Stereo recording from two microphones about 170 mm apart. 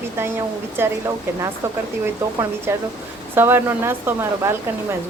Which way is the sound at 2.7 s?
15° right (ahead or behind).